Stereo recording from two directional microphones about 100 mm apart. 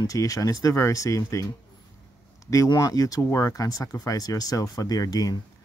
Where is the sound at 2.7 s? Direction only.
40° left (ahead or behind).